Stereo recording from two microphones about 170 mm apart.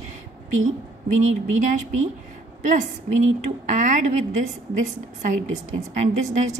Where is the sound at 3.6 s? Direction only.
45° right (ahead or behind).